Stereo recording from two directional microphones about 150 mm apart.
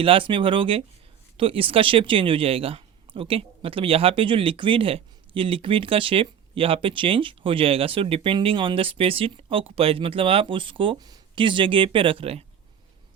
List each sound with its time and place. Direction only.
0.0 s speech: 35° right (ahead or behind)